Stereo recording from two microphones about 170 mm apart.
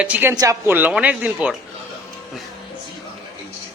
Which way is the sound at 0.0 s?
10° right (ahead or behind).